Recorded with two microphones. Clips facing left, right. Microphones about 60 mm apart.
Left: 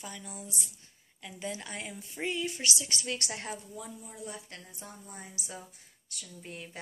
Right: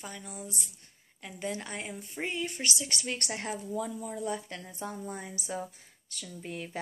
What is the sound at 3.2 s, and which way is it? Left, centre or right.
Speech, right.